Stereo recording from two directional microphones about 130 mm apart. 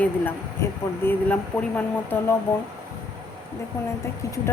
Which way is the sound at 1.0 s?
15° left (ahead or behind).